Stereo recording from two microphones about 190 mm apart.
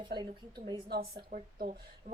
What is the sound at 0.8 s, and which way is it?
A woman's voice, 55° right (ahead or behind).